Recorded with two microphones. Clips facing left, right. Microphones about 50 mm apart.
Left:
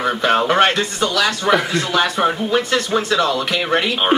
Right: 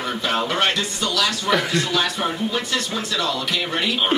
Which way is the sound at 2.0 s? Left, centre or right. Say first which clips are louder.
Left 5 dB; left.